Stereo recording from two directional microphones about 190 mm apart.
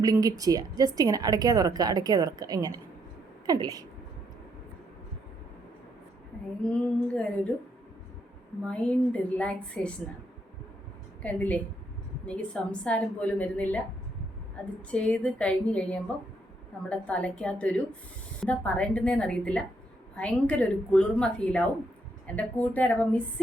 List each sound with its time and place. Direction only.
0.0 s a woman's voice: 20° right (ahead or behind)
6.7 s a woman's voice: 5° left (ahead or behind)
8.6 s a woman's voice: 5° left (ahead or behind)
11.2 s a woman's voice: 10° left (ahead or behind)